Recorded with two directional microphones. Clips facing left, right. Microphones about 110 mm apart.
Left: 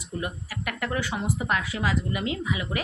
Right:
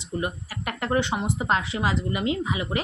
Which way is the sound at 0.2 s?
30° right (ahead or behind).